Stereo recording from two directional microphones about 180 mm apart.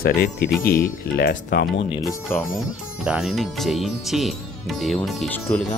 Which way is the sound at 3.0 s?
5° right (ahead or behind).